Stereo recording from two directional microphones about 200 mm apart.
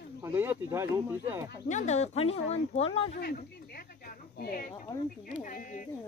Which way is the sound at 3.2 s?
50° left (ahead or behind).